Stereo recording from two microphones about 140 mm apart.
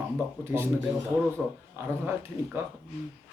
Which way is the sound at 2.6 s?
20° right (ahead or behind).